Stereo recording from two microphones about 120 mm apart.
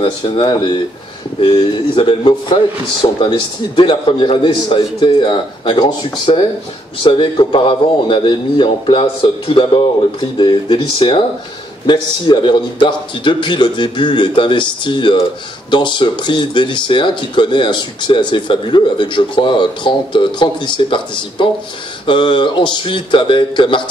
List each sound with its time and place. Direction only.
0.0 s speech: 45° left (ahead or behind)